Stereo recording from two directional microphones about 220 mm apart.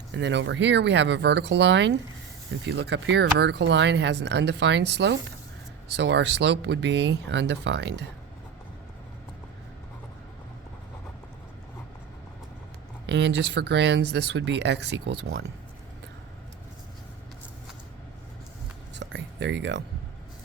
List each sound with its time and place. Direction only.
0.1 s speech: 55° right (ahead or behind)
13.1 s speech: 50° right (ahead or behind)
18.9 s a sound: 55° right (ahead or behind)